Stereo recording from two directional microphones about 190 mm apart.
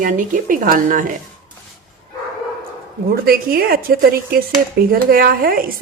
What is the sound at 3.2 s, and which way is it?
Speech, 50° right (ahead or behind).